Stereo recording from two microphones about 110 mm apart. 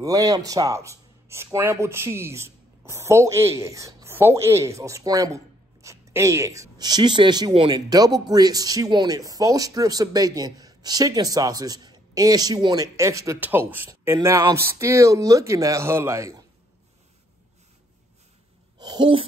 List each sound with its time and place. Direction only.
0.0 s speech: 30° right (ahead or behind)
13.4 s speech: 15° right (ahead or behind)
18.8 s speech: 45° right (ahead or behind)